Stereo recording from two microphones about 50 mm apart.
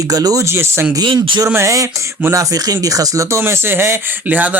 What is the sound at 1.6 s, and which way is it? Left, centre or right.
Speech, right.